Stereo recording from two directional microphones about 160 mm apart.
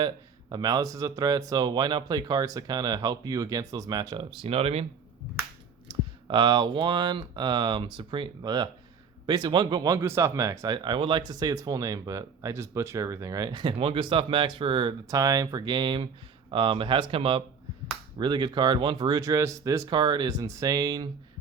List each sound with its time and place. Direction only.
0.5 s speech: 25° right (ahead or behind); by 4.9 s 40° right (ahead or behind)
5.9 s speech: 30° right (ahead or behind)